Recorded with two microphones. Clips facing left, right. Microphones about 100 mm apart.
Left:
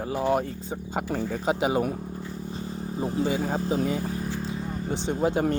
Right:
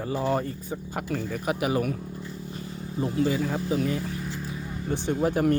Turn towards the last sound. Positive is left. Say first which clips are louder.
# right 1 dB
turn(degrees=25)  # may be behind; listen again after turning